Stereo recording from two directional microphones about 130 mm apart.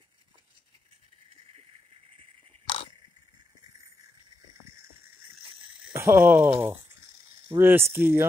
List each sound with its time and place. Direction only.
5.9 s speech: 20° right (ahead or behind)